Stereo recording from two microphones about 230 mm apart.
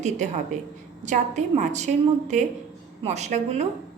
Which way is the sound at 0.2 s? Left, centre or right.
Right.